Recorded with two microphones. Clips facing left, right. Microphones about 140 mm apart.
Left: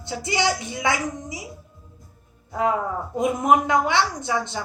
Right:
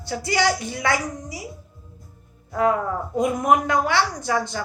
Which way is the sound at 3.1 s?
20° left (ahead or behind).